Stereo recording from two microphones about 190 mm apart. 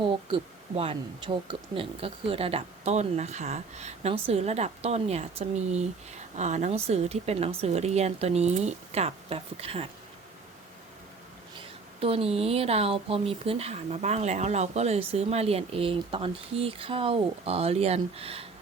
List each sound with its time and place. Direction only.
0.0 s speech: 30° right (ahead or behind)
11.9 s speech: 30° right (ahead or behind)